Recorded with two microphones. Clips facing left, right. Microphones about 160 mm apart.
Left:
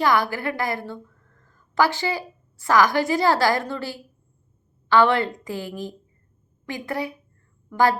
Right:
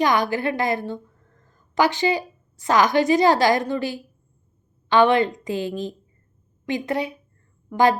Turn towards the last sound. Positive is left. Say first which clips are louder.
# right 2 dB
turn(degrees=-20)  # may be behind; listen again after turning